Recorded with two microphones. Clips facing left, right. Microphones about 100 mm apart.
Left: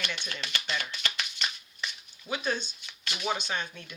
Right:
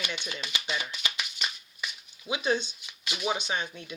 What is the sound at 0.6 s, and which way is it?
Music, 10° right (ahead or behind).